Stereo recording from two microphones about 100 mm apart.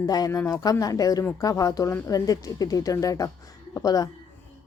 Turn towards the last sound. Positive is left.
turn(degrees=40)  # may be behind; listen again after turning